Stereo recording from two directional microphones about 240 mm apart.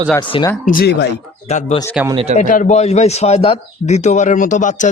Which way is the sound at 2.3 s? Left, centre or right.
Left.